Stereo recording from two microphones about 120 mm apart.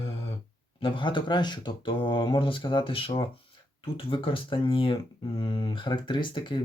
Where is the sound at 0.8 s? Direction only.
45° left (ahead or behind).